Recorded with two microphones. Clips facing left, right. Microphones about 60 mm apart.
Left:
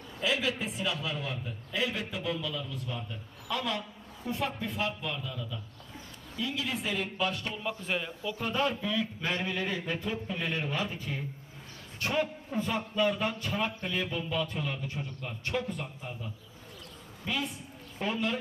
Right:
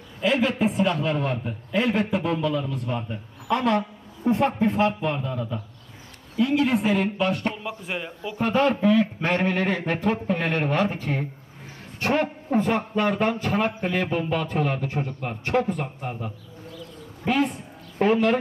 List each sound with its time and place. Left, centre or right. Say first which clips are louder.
0.2 s a man's voice: right 9 dB; right
7.6 s a man's voice: right 2 dB; centre
8.4 s a man's voice: right 10 dB; right